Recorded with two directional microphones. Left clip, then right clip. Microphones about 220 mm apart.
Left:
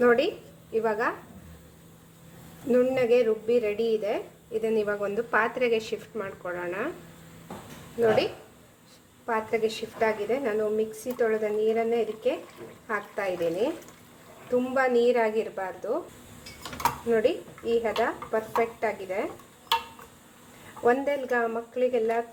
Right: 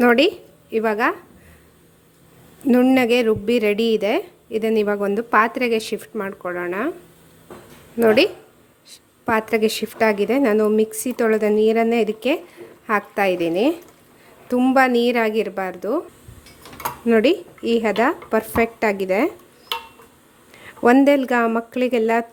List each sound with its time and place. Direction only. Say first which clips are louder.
0.0 s a woman's voice: right 7 dB; 45° right (ahead or behind)
2.6 s speech: right 6 dB; 45° right (ahead or behind)
7.9 s a woman's voice: right 8 dB; 50° right (ahead or behind)
17.1 s a woman's voice: right 10 dB; 55° right (ahead or behind)
20.8 s a woman's voice: right 10 dB; 50° right (ahead or behind)